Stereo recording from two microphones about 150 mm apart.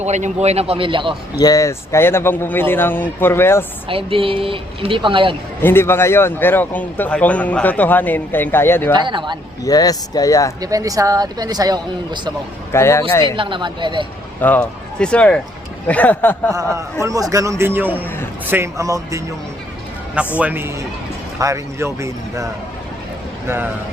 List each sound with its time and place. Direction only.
0.0 s speech: 50° right (ahead or behind)
1.4 s a man's voice: 25° left (ahead or behind)
3.8 s a woman's voice: 35° right (ahead or behind)
5.6 s a man's voice: 15° left (ahead or behind)
8.9 s a woman's voice: 30° right (ahead or behind)
9.6 s speech: 25° left (ahead or behind)
10.6 s speech: 25° right (ahead or behind)
12.7 s speech: 20° left (ahead or behind)
13.3 s a woman's voice: 35° right (ahead or behind)
14.4 s a man's voice: 10° left (ahead or behind)
16.7 s speech: 20° right (ahead or behind)
17.9 s a man's voice: 10° left (ahead or behind)
18.4 s speech: 15° right (ahead or behind)
20.4 s a man's voice: 15° right (ahead or behind)